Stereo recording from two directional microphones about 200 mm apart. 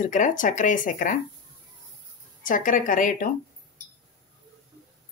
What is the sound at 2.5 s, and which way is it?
Speech, 40° left (ahead or behind).